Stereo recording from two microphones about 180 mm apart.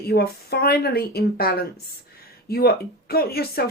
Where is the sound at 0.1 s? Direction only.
60° left (ahead or behind).